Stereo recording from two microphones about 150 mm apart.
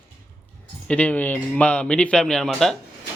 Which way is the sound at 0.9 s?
10° left (ahead or behind).